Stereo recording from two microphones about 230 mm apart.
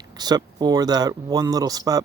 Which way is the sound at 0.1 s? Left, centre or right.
Centre.